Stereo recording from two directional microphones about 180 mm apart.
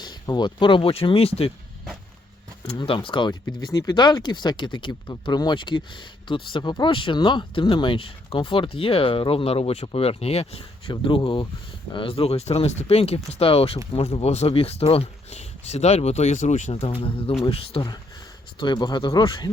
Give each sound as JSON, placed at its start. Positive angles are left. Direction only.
{"t": 0.0, "sound": "speech", "side_deg": 25}
{"t": 2.6, "sound": "speech", "side_deg": 30}
{"t": 16.8, "sound": "speech", "side_deg": 30}